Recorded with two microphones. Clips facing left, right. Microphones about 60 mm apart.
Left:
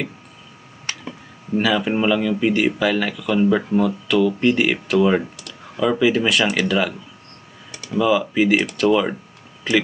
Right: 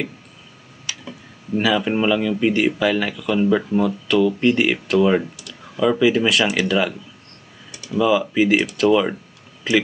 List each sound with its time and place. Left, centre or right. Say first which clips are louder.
0.9 s a sound: left 2 dB; left
1.6 s speech: even; centre
8.0 s speech: even; centre